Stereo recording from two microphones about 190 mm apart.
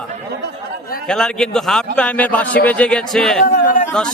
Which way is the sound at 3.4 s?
45° left (ahead or behind).